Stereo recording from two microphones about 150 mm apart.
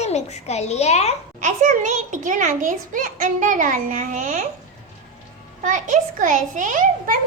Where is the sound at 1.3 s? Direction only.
55° right (ahead or behind).